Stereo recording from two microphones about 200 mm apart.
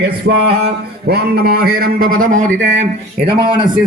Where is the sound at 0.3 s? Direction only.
55° right (ahead or behind).